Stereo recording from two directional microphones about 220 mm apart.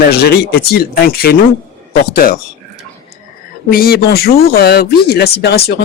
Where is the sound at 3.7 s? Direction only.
45° left (ahead or behind).